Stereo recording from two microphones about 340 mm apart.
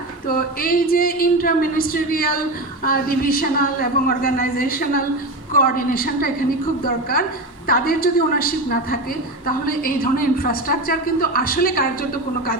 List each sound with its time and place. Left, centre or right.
0.3 s a woman's voice: left